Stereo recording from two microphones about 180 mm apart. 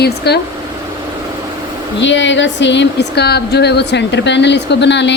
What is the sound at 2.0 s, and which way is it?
Speech, 90° left.